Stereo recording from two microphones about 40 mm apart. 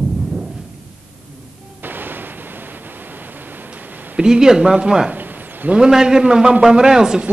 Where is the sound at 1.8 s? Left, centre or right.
Right.